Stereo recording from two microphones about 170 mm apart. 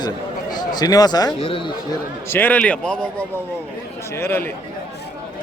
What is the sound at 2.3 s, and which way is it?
A man's voice, 10° left (ahead or behind).